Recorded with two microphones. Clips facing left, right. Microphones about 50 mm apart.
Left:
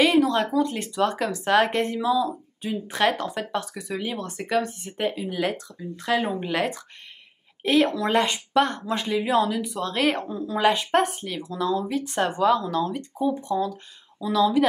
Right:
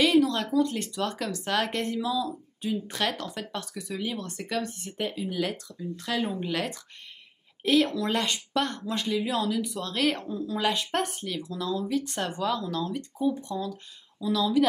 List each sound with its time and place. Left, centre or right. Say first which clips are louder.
0.0 s speech: left 3 dB; centre